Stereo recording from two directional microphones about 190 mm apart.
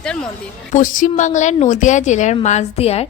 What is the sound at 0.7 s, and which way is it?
A woman's voice, 45° left (ahead or behind).